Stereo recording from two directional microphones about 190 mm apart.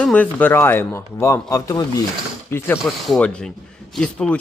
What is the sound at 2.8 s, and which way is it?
Speech, centre (ahead or behind).